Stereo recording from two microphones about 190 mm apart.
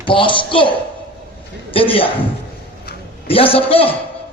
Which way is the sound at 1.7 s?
30° left (ahead or behind).